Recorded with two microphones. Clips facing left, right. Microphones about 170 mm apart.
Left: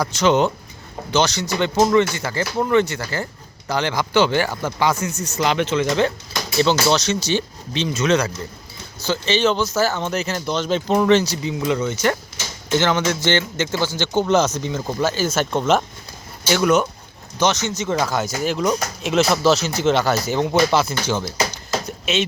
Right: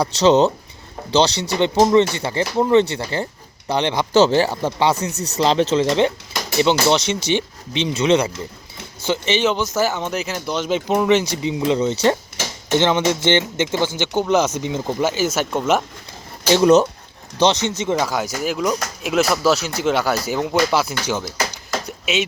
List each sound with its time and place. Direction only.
0.0 s speech: 35° right (ahead or behind)
4.1 s speech: 35° right (ahead or behind); by 11.2 s 10° right (ahead or behind)
11.2 s speech: 20° right (ahead or behind)
14.5 s speech: 25° right (ahead or behind)
16.5 s speech: 30° right (ahead or behind)
17.8 s speech: 10° right (ahead or behind)